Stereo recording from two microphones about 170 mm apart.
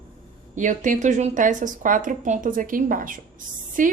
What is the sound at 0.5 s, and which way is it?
A woman's voice, 45° right (ahead or behind).